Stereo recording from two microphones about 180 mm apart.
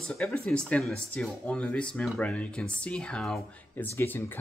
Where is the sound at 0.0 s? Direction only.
5° left (ahead or behind).